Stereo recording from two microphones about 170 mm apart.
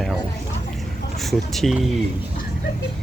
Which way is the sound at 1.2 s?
Centre (ahead or behind).